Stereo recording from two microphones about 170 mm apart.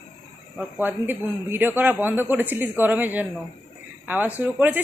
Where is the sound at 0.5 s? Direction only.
10° right (ahead or behind).